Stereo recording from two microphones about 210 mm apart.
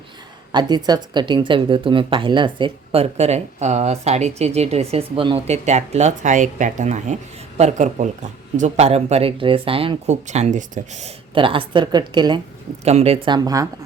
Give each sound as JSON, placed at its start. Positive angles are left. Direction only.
{"t": 0.5, "sound": "speech", "side_deg": -20}